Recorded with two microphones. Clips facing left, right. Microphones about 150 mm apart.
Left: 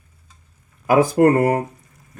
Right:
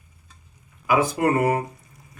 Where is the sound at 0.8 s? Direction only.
45° left (ahead or behind).